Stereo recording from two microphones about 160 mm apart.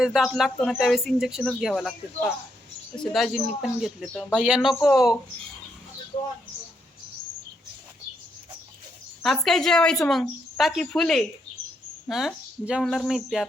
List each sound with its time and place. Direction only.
0.0 s speech: 5° right (ahead or behind)
4.8 s speech: 20° left (ahead or behind)
9.2 s speech: centre (ahead or behind)